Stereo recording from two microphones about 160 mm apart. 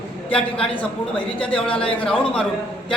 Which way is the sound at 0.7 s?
10° left (ahead or behind).